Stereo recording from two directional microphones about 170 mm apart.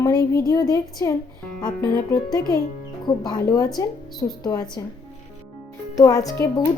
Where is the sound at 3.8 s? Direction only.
20° left (ahead or behind).